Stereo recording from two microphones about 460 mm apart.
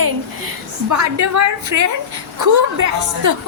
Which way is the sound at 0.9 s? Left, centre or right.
Right.